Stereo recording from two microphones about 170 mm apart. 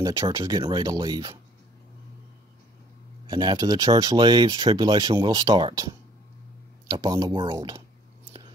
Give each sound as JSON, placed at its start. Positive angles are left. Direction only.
{"t": 0.0, "sound": "speech", "side_deg": -20}
{"t": 3.3, "sound": "speech", "side_deg": -25}